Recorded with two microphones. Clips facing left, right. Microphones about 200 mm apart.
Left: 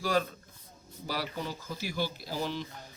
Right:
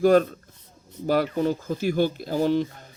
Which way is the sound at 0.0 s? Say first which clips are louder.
Right 12 dB; 55° right (ahead or behind).